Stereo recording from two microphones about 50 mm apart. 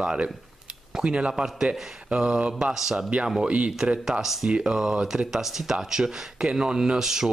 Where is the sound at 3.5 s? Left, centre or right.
Right.